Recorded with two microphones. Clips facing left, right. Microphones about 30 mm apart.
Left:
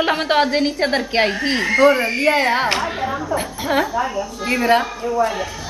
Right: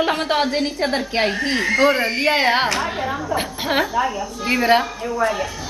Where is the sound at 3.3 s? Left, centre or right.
Right.